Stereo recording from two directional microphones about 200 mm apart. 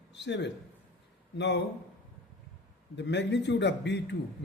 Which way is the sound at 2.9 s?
60° left (ahead or behind).